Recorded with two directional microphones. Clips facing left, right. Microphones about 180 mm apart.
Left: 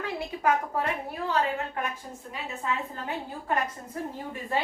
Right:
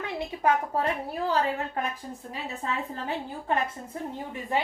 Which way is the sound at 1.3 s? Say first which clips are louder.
Even; 35° right (ahead or behind).